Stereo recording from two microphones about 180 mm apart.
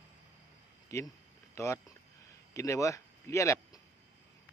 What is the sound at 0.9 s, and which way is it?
Speech, 15° left (ahead or behind).